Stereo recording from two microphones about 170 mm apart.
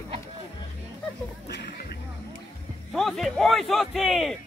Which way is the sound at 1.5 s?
75° left (ahead or behind).